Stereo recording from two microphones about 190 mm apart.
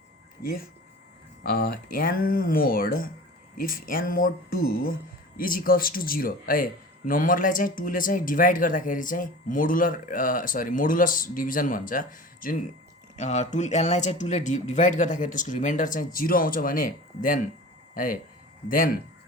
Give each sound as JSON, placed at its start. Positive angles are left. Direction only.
{"t": 0.4, "sound": "speech", "side_deg": 50}